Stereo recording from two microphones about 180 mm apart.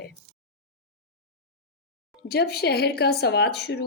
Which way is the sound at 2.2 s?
65° left (ahead or behind).